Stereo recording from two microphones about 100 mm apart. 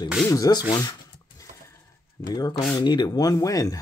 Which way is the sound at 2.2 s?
45° left (ahead or behind).